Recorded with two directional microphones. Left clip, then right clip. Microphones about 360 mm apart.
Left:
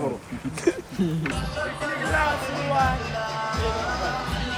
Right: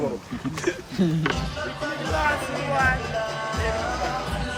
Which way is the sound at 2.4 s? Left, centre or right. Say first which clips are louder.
Left 1 dB; right.